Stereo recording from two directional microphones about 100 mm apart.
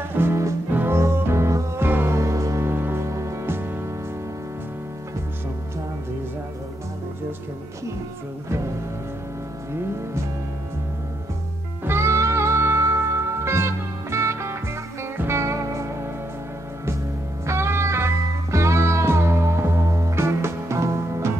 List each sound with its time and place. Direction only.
0.1 s music: 25° right (ahead or behind)
11.8 s music: 25° right (ahead or behind)
17.5 s music: 25° right (ahead or behind)